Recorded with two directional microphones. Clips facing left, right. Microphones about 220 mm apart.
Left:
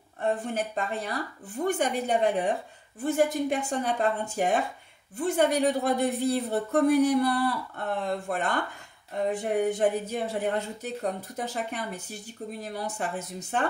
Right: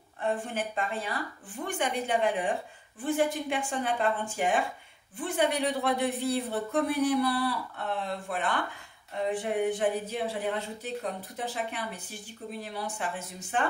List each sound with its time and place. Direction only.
0.2 s a woman's voice: 40° left (ahead or behind)